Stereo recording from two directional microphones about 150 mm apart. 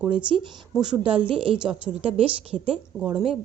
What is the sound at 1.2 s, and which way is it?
Speech, 35° right (ahead or behind).